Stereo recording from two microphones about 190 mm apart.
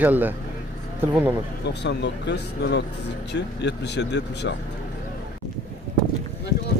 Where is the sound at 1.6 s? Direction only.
65° left (ahead or behind).